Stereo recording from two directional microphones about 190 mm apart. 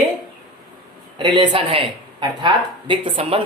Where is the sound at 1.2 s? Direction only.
25° right (ahead or behind).